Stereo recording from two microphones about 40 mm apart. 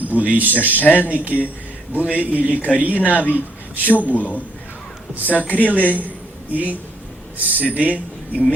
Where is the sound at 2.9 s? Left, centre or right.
Left.